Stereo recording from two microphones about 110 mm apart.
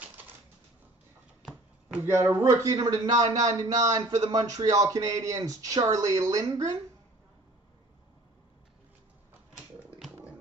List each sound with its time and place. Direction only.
2.0 s speech: 25° right (ahead or behind)